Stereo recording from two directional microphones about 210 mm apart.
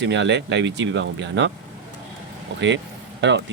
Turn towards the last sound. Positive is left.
turn(degrees=-55)  # may be behind; listen again after turning